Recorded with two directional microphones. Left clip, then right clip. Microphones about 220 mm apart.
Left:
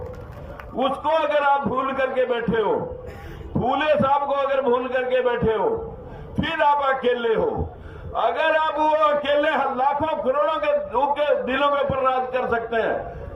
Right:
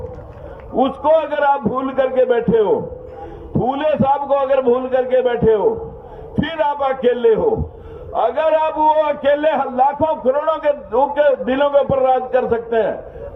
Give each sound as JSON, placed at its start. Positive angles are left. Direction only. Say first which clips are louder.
{"t": 0.8, "sound": "a man's voice", "louder": "right 6 dB", "side_deg": -35}